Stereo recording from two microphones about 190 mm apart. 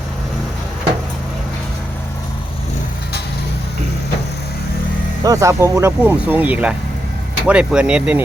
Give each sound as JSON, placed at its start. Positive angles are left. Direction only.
{"t": 5.2, "sound": "speech", "side_deg": -15}